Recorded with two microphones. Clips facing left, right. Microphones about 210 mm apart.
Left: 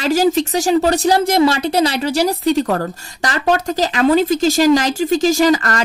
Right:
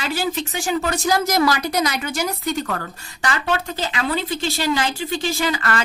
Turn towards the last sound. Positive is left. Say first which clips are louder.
# left 8 dB
turn(degrees=40)  # may be behind; listen again after turning